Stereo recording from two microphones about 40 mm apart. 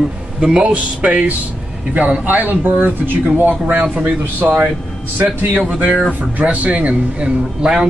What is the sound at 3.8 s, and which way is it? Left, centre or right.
Speech, right.